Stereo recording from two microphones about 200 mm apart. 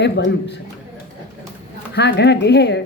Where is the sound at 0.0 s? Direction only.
60° left (ahead or behind).